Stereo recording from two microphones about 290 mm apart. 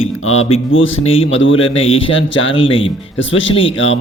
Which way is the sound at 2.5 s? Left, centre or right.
Centre.